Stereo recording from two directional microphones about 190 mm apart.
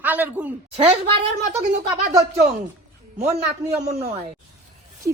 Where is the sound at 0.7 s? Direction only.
30° right (ahead or behind).